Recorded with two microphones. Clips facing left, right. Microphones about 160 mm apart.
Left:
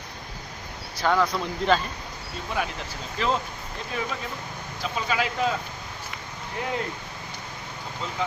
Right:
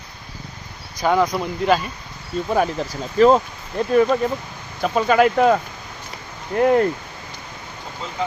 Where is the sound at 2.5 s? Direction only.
45° right (ahead or behind).